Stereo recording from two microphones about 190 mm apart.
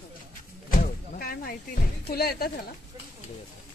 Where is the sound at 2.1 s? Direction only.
55° left (ahead or behind).